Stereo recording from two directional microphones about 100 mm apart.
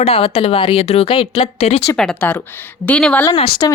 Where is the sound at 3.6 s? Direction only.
45° left (ahead or behind).